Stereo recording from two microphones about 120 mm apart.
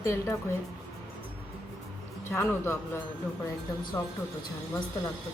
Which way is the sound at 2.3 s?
15° left (ahead or behind).